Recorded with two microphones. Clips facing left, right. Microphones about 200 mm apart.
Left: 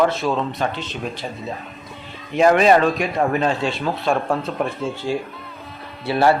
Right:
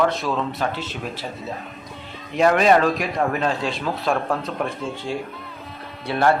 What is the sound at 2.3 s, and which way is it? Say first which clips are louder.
Speech: left 2 dB; centre (ahead or behind).